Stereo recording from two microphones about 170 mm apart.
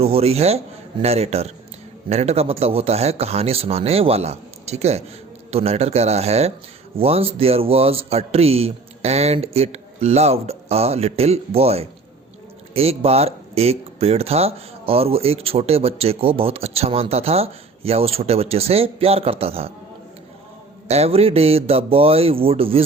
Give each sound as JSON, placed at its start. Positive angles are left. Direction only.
{"t": 0.0, "sound": "speech", "side_deg": -35}
{"t": 20.8, "sound": "speech", "side_deg": -40}